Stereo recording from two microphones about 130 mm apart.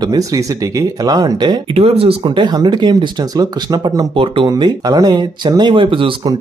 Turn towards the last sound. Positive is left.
turn(degrees=-40)  # may be behind; listen again after turning